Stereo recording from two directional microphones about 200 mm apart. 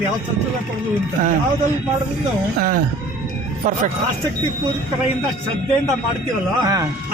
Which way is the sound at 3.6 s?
40° right (ahead or behind).